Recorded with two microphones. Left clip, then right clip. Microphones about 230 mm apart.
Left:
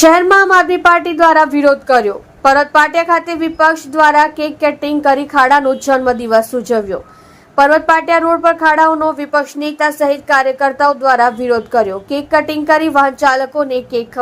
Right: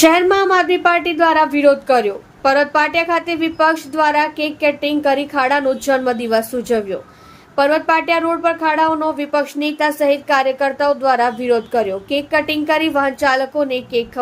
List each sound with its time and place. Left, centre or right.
0.0 s speech: centre